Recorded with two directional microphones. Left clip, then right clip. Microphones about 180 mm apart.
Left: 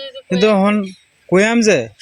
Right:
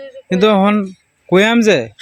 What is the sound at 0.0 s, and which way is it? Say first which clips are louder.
Speech: right 1 dB; 10° right (ahead or behind).